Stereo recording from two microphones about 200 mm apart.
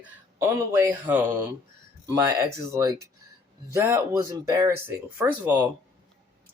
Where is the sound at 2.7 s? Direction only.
15° right (ahead or behind).